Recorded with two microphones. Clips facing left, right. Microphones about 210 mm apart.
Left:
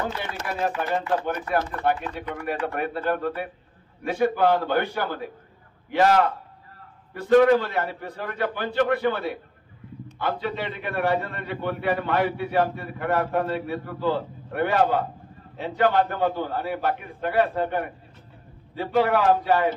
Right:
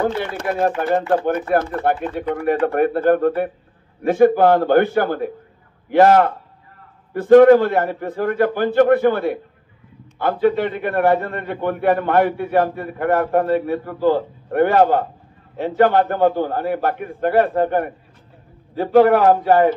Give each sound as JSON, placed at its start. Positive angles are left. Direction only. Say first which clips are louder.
{"t": 0.0, "sound": "a man's voice", "louder": "right 9 dB", "side_deg": -55}